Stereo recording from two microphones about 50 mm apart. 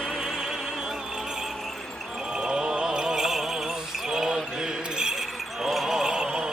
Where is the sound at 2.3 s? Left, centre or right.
Centre.